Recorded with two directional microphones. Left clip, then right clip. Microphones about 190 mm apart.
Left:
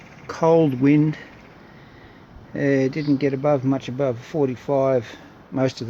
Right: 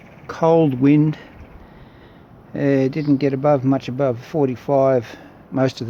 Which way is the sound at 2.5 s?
10° right (ahead or behind).